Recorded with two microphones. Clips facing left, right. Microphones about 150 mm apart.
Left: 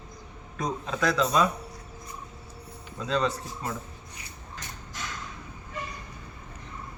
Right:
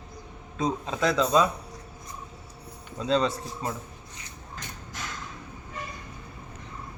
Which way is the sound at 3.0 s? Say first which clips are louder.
Right 3 dB; 30° right (ahead or behind).